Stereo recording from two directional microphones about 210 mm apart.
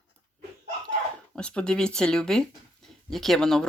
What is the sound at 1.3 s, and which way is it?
Speech, 5° left (ahead or behind).